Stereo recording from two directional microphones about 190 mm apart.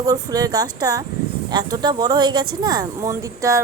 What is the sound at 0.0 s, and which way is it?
Speech, 20° right (ahead or behind).